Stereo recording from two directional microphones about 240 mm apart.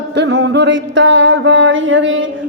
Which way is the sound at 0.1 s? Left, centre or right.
Right.